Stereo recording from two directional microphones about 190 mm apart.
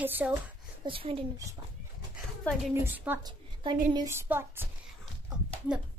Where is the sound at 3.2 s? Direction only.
25° right (ahead or behind).